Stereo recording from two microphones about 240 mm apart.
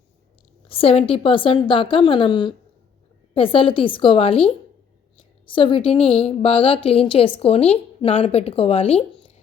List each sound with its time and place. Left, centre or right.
0.7 s a woman's voice: left